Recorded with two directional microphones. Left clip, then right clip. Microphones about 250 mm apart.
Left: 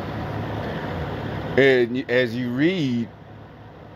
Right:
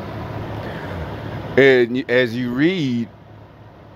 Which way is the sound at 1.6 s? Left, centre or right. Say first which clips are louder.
Right 4 dB; centre.